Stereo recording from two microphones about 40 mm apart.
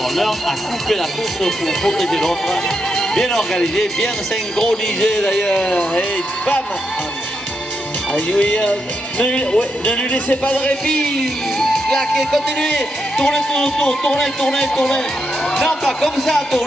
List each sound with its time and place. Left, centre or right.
0.1 s a man's voice: centre; by 6.6 s left
8.4 s speech: left
9.2 s speech: left
11.1 s music: centre
11.9 s speech: centre
16.0 s speech: centre